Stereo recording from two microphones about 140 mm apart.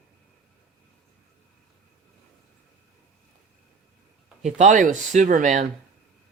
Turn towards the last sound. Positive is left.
turn(degrees=-65)  # may be behind; listen again after turning